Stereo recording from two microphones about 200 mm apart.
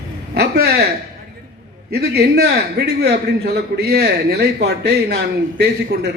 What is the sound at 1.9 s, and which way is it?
A man's voice, 55° right (ahead or behind).